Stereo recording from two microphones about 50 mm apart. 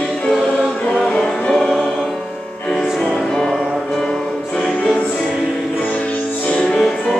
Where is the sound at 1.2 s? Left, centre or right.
Centre.